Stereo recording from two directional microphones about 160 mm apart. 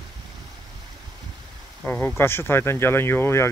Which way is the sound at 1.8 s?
10° left (ahead or behind).